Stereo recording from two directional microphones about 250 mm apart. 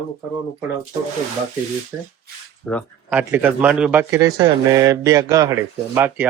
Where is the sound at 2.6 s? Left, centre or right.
Centre.